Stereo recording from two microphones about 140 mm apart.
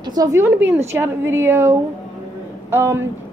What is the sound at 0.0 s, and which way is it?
A woman's voice, 25° right (ahead or behind).